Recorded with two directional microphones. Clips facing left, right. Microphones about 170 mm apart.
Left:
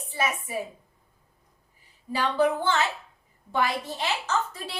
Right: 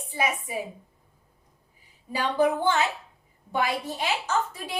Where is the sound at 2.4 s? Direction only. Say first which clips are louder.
Right 1 dB; 15° right (ahead or behind).